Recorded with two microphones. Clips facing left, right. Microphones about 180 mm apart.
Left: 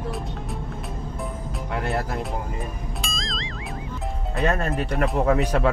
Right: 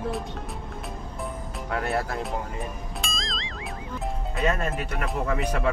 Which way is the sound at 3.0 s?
Centre (ahead or behind).